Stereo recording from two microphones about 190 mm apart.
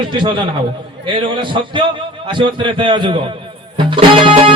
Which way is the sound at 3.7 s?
25° right (ahead or behind).